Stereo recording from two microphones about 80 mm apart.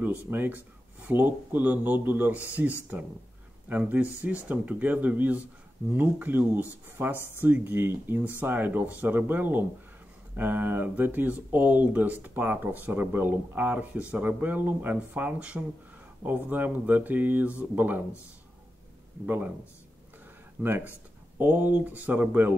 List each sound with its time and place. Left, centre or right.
0.3 s speech: right
19.2 s speech: right
20.6 s speech: right